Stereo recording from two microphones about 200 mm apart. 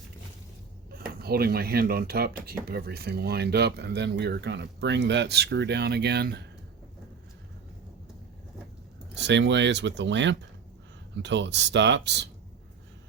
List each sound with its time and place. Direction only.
0.9 s speech: 50° right (ahead or behind)
9.1 s speech: 60° right (ahead or behind)